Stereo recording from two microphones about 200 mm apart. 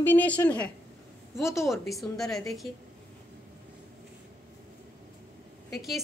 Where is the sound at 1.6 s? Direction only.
Centre (ahead or behind).